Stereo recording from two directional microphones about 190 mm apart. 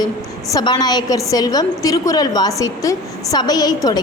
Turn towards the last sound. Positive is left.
turn(degrees=20)  # may be behind; listen again after turning